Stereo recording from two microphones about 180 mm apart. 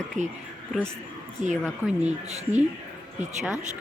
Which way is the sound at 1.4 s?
45° right (ahead or behind).